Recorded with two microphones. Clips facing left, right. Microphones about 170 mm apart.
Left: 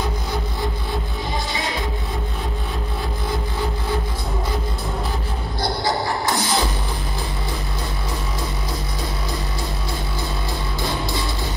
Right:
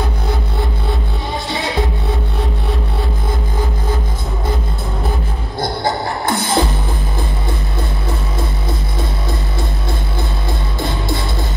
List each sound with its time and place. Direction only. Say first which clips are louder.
6.2 s music: right 7 dB; 55° right (ahead or behind)